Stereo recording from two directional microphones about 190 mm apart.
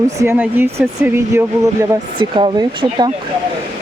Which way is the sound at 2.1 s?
25° right (ahead or behind).